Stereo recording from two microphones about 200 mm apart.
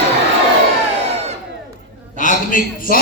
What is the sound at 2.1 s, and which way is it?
Speech, 40° left (ahead or behind).